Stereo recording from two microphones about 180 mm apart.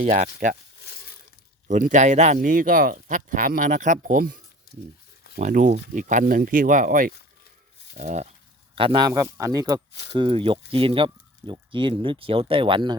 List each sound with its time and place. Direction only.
0.0 s speech: 45° right (ahead or behind)
1.6 s speech: 45° right (ahead or behind)
5.4 s speech: 45° right (ahead or behind)
8.7 s speech: 25° right (ahead or behind)